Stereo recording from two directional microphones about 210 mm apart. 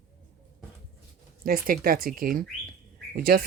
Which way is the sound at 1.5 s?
45° right (ahead or behind).